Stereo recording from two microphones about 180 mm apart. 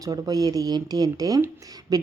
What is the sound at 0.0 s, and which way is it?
Speech, 20° right (ahead or behind).